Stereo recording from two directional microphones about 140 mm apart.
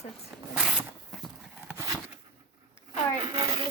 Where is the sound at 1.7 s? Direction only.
20° right (ahead or behind).